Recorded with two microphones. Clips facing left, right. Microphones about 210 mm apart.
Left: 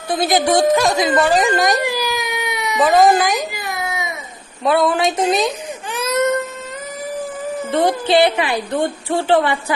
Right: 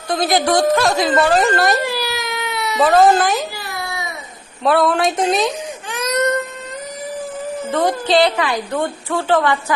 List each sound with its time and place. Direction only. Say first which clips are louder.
0.3 s speech: left 1 dB; centre (ahead or behind)
0.5 s speech: left 1 dB; 15° left (ahead or behind)
1.4 s baby cry: even; 15° left (ahead or behind)
4.6 s speech: even; centre (ahead or behind)
7.8 s speech: left 1 dB; 10° left (ahead or behind)
8.2 s a woman's voice: left 1 dB; 25° left (ahead or behind)